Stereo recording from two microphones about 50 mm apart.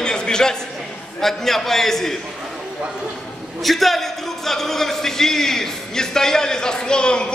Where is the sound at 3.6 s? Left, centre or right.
Centre.